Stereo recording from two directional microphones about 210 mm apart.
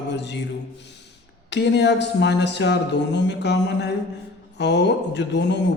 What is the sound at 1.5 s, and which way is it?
Speech, 55° left (ahead or behind).